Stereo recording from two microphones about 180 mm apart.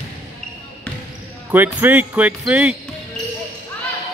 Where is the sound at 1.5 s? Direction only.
10° right (ahead or behind).